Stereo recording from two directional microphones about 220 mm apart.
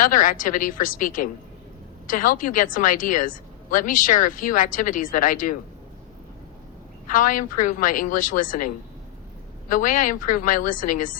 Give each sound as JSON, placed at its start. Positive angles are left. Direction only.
{"t": 0.0, "sound": "a woman's voice", "side_deg": 35}
{"t": 7.1, "sound": "a woman's voice", "side_deg": 40}